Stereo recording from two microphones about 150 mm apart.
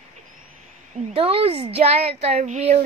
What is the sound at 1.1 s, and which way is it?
Speech, 40° right (ahead or behind).